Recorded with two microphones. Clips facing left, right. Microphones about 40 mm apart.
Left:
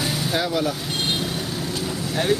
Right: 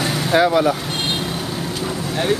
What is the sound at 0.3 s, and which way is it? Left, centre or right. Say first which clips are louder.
Speech: right 10 dB; right.